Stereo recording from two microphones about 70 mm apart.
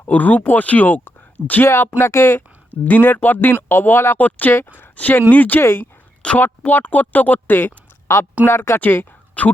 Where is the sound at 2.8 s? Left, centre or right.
Left.